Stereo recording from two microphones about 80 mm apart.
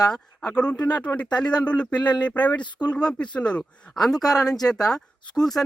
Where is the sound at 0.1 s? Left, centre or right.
Centre.